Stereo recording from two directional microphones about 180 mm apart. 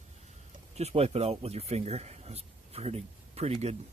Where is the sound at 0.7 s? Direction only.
35° right (ahead or behind).